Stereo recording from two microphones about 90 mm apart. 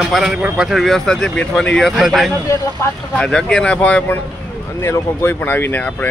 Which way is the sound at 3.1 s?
10° left (ahead or behind).